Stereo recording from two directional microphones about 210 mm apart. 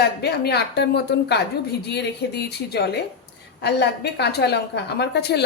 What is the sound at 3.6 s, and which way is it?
A woman's voice, 50° left (ahead or behind).